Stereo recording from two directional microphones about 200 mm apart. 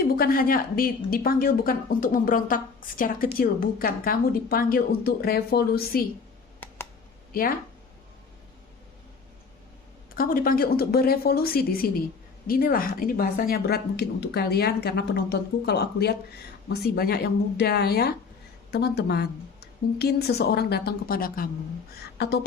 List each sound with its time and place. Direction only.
0.0 s a woman's voice: 45° left (ahead or behind)
10.2 s a woman's voice: 45° left (ahead or behind)